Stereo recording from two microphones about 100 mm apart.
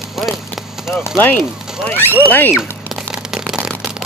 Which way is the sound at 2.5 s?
5° right (ahead or behind).